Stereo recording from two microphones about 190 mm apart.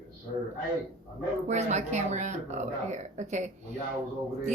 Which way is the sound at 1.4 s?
35° right (ahead or behind).